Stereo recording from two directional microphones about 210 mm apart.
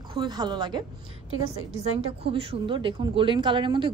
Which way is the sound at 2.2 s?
25° right (ahead or behind).